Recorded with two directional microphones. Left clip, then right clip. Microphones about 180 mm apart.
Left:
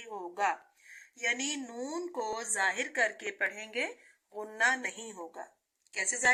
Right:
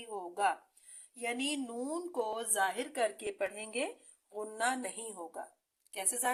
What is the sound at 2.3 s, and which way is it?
Speech, 35° right (ahead or behind).